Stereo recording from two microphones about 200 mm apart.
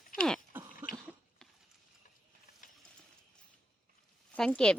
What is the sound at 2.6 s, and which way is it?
Mechanisms, 40° left (ahead or behind).